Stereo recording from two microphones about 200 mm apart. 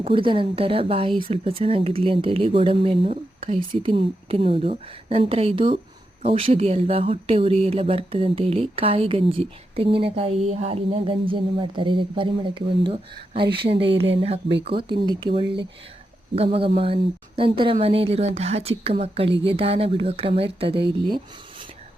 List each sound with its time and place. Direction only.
0.0 s speech: 25° right (ahead or behind)